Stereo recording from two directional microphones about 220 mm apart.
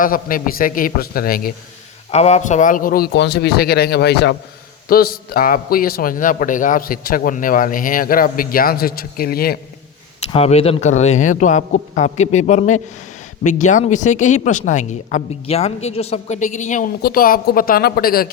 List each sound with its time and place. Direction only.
0.0 s speech: 40° left (ahead or behind)
2.0 s a man's voice: 30° left (ahead or behind)
10.3 s speech: 30° left (ahead or behind)